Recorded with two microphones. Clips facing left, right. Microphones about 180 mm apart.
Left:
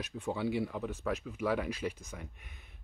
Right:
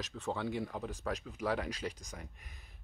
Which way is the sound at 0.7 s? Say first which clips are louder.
Left 3 dB; 35° right (ahead or behind).